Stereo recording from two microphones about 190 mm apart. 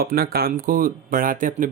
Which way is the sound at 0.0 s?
55° right (ahead or behind).